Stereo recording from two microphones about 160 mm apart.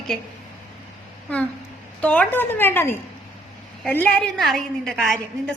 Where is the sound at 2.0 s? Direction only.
10° left (ahead or behind).